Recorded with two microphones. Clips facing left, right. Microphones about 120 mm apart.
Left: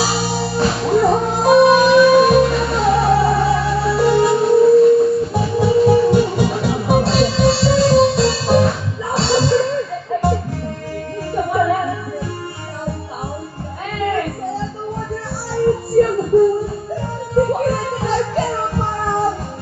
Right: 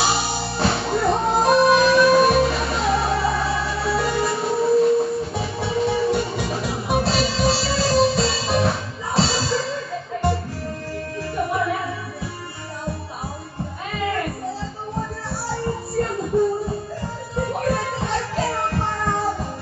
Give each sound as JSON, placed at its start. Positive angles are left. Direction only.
{"t": 0.0, "sound": "music", "side_deg": 0}
{"t": 11.5, "sound": "music", "side_deg": 0}
{"t": 13.9, "sound": "music", "side_deg": 0}
{"t": 15.6, "sound": "music", "side_deg": 0}
{"t": 18.4, "sound": "music", "side_deg": 15}